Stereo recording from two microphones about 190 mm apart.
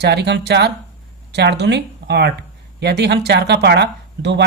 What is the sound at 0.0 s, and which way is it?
Speech, 65° right (ahead or behind).